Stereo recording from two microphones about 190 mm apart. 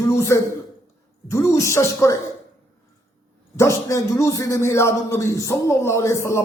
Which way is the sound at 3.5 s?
15° left (ahead or behind).